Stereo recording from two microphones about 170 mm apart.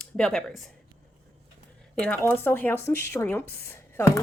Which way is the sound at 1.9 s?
5° left (ahead or behind).